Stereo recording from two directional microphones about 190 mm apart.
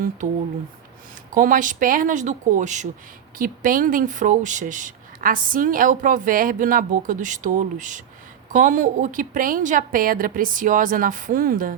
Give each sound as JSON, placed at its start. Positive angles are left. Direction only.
{"t": 1.3, "sound": "speech", "side_deg": -45}